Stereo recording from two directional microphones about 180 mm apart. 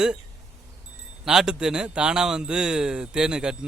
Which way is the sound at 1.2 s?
5° right (ahead or behind).